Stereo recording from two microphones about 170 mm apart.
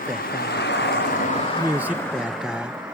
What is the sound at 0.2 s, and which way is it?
Waves, 65° left (ahead or behind).